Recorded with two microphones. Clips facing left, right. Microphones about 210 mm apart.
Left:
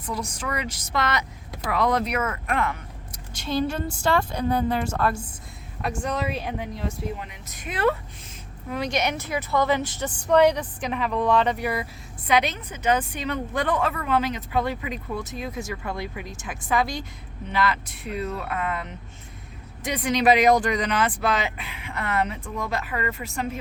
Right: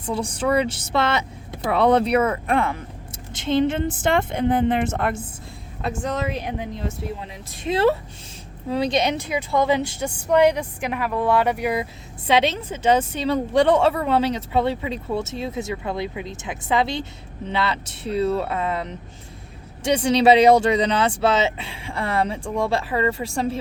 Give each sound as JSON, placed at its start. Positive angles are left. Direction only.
{"t": 0.0, "sound": "a woman's voice", "side_deg": -30}
{"t": 12.3, "sound": "a woman's voice", "side_deg": -25}